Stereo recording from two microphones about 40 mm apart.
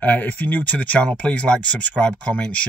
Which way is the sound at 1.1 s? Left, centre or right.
Left.